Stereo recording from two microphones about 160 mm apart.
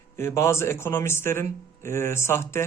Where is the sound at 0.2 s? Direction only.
15° left (ahead or behind).